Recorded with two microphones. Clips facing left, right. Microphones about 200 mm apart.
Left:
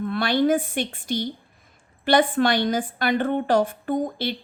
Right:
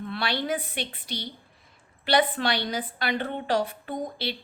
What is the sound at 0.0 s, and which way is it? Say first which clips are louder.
A woman's voice: left 9 dB; 50° left (ahead or behind).